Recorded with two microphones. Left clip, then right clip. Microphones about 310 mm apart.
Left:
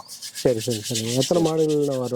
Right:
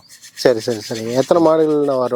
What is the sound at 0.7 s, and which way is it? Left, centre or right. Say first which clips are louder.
Speech: right 5 dB; centre.